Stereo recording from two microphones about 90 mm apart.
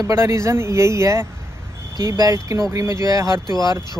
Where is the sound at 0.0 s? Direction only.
30° right (ahead or behind).